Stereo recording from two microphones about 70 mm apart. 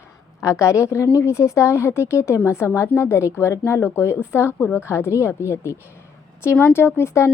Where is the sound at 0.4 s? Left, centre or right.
Left.